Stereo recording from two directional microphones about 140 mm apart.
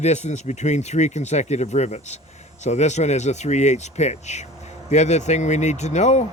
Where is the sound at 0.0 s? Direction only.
55° left (ahead or behind).